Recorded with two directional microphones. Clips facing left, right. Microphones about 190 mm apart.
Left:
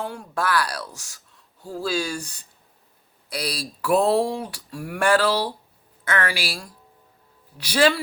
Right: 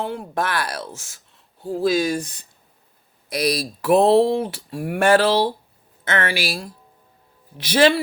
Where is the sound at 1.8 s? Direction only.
35° left (ahead or behind).